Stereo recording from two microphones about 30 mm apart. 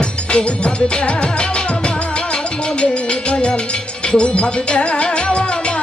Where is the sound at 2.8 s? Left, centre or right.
Left.